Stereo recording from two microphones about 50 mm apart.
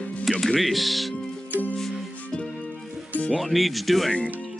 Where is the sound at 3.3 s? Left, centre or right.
Centre.